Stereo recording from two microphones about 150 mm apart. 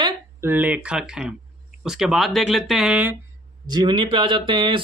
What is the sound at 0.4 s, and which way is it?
Speech, 10° right (ahead or behind).